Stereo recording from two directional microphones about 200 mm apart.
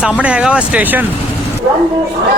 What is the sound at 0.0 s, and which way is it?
Speech, 5° right (ahead or behind).